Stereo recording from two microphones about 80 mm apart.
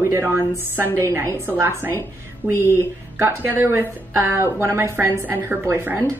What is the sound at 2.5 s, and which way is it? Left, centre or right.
Speech, right.